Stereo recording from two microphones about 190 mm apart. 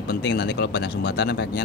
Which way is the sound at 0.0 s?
60° left (ahead or behind).